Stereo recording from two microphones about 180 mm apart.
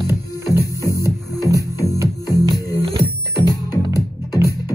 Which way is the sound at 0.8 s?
20° left (ahead or behind).